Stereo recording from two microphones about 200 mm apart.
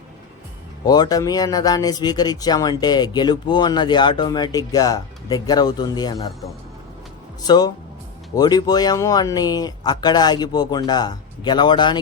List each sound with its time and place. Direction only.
0.9 s speech: 20° left (ahead or behind)
7.4 s speech: 20° left (ahead or behind)